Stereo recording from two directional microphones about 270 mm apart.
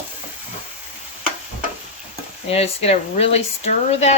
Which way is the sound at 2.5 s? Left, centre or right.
Left.